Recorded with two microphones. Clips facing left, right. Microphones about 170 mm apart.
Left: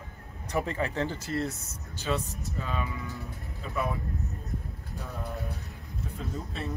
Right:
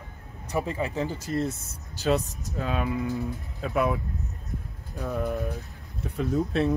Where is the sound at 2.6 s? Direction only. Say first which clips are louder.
Right 7 dB; 65° right (ahead or behind).